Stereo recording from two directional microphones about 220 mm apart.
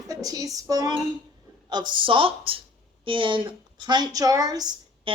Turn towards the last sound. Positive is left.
turn(degrees=-15)  # may be behind; listen again after turning